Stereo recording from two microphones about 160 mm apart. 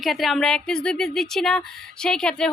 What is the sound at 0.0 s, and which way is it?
Speech, centre (ahead or behind).